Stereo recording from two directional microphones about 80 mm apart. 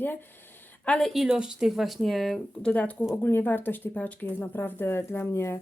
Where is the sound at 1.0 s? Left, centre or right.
Centre.